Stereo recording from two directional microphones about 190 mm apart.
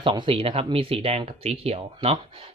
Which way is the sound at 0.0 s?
25° right (ahead or behind).